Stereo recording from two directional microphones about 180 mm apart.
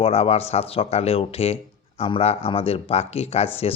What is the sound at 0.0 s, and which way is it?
Speech, 35° left (ahead or behind).